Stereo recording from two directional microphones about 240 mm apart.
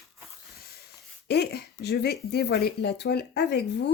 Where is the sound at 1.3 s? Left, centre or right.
Left.